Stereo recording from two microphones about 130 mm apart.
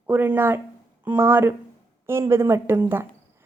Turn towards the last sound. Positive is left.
turn(degrees=-15)  # may be behind; listen again after turning